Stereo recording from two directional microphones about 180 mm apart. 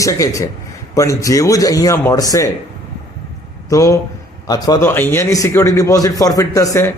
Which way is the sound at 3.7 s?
20° left (ahead or behind).